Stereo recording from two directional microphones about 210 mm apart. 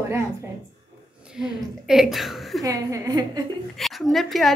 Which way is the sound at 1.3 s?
Centre (ahead or behind).